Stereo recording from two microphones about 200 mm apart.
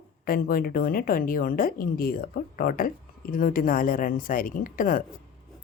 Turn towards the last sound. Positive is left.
turn(degrees=45)  # may be behind; listen again after turning